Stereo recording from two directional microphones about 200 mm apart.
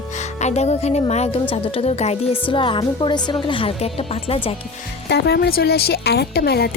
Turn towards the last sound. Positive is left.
turn(degrees=50)  # may be behind; listen again after turning